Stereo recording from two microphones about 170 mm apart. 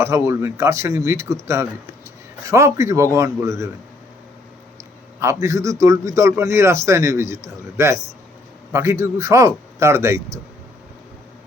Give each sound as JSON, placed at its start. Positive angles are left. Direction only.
{"t": 0.0, "sound": "a man's voice", "side_deg": -15}
{"t": 5.2, "sound": "a man's voice", "side_deg": -15}